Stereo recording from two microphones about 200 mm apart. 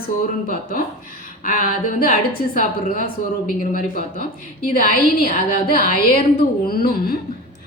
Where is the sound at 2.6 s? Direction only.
40° left (ahead or behind).